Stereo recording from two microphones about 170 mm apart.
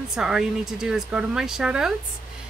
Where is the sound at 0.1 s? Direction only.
5° right (ahead or behind).